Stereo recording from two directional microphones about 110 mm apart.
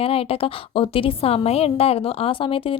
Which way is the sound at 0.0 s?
60° left (ahead or behind).